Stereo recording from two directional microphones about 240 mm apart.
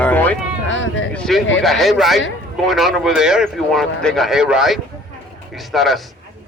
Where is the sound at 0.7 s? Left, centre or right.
Left.